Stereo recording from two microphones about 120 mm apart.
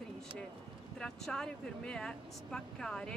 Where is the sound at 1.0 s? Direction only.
5° left (ahead or behind).